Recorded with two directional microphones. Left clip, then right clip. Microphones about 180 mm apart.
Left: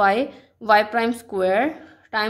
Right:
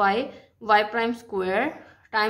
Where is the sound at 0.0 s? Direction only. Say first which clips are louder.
Left 4 dB; 30° left (ahead or behind).